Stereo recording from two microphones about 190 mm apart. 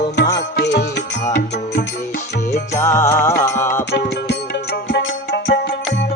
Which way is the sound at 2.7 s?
15° left (ahead or behind).